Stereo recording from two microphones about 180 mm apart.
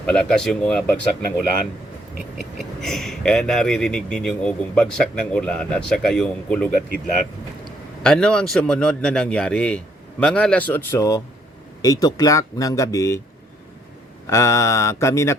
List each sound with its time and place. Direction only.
0.0 s speech: 5° left (ahead or behind)
2.8 s speech: centre (ahead or behind)
8.0 s speech: 5° left (ahead or behind)
14.3 s mantra: 15° left (ahead or behind)